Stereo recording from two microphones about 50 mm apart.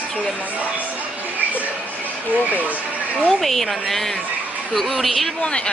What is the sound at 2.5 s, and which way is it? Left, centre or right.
Speech, right.